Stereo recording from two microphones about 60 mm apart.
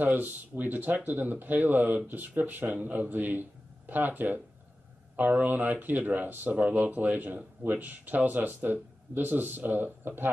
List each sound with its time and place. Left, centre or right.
0.0 s speech: right